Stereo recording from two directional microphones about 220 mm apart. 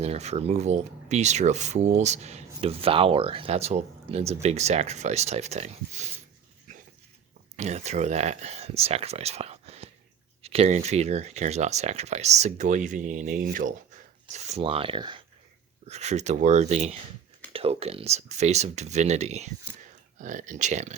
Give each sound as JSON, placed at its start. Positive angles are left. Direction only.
{"t": 0.0, "sound": "speech", "side_deg": -30}
{"t": 7.5, "sound": "speech", "side_deg": -30}